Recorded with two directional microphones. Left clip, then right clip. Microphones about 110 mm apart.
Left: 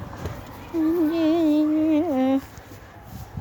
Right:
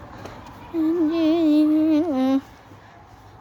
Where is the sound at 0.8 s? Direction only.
20° right (ahead or behind).